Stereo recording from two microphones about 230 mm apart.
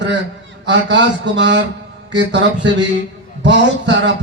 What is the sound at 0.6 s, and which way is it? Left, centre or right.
A man's voice, right.